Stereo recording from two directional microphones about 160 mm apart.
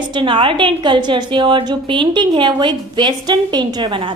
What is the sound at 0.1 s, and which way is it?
A woman's voice, 30° right (ahead or behind).